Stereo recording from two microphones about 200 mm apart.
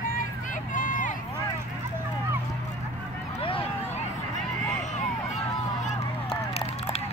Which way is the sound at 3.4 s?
25° left (ahead or behind).